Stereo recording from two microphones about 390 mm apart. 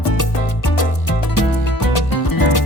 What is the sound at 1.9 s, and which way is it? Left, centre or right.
Music, left.